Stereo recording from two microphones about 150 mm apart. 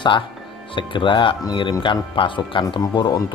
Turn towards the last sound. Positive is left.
turn(degrees=25)  # may be behind; listen again after turning